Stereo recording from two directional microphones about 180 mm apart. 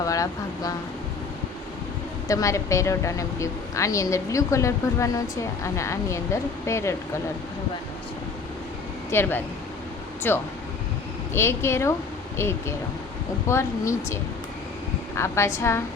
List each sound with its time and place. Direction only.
0.0 s speech: 20° left (ahead or behind)
2.2 s a woman's voice: 20° left (ahead or behind)
9.0 s a woman's voice: 15° left (ahead or behind)